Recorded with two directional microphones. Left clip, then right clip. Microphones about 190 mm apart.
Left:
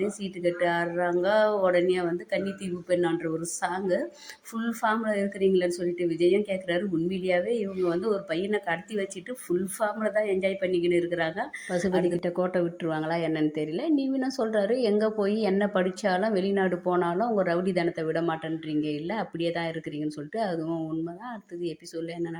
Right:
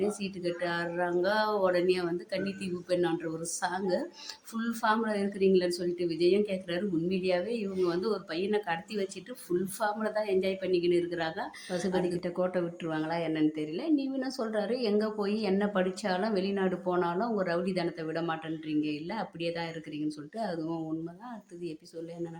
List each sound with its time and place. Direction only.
0.2 s a woman's voice: 15° left (ahead or behind)